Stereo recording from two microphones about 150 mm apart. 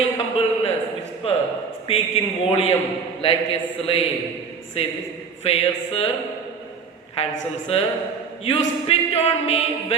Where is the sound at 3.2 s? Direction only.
40° left (ahead or behind).